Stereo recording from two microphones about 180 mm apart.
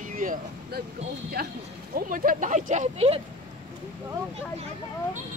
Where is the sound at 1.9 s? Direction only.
50° right (ahead or behind).